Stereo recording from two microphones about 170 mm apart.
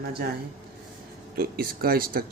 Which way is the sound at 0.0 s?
65° right (ahead or behind).